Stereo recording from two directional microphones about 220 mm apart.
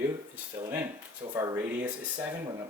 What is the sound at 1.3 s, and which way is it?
Speech, 15° right (ahead or behind).